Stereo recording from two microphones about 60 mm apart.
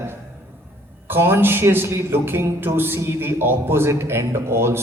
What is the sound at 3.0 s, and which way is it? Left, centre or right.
A man's voice, right.